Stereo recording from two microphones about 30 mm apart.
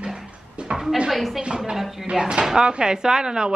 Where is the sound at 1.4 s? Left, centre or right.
Right.